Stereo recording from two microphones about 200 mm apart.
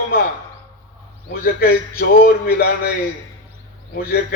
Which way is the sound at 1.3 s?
50° left (ahead or behind).